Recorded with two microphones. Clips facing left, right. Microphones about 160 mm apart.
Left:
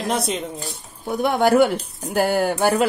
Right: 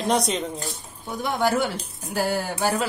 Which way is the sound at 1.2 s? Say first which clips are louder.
Left 7 dB; 65° left (ahead or behind).